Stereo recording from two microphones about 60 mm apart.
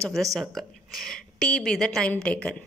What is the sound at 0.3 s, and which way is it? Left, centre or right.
A woman's voice, centre.